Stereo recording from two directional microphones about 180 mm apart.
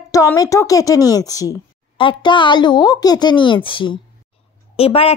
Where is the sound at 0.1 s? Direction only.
20° left (ahead or behind).